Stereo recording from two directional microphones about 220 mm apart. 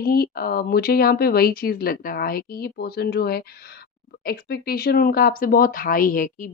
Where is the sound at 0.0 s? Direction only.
40° left (ahead or behind).